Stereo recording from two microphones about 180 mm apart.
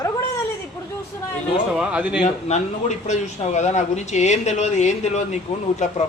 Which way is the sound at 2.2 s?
40° left (ahead or behind).